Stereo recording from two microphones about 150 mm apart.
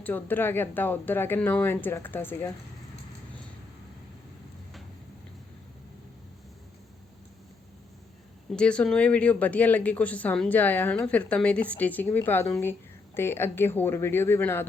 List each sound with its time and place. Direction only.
0.0 s speech: 10° left (ahead or behind)
8.4 s speech: 5° left (ahead or behind)